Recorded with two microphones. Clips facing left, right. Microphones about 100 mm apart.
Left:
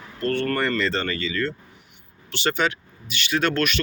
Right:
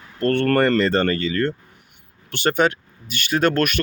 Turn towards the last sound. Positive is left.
turn(degrees=-45)  # may be behind; listen again after turning